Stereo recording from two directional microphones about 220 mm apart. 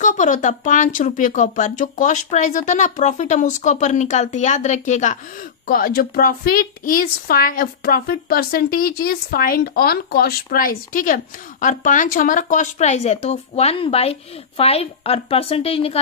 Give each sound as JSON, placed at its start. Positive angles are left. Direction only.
{"t": 0.0, "sound": "speech", "side_deg": 35}